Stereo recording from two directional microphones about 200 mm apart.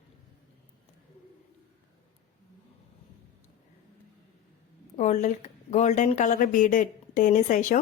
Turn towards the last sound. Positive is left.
turn(degrees=40)  # may be behind; listen again after turning